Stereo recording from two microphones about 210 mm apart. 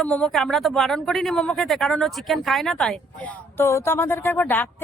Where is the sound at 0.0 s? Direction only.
5° left (ahead or behind).